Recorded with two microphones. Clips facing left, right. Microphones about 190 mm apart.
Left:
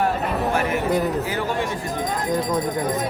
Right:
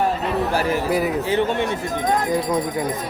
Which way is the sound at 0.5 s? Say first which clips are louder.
Right 1 dB; 35° right (ahead or behind).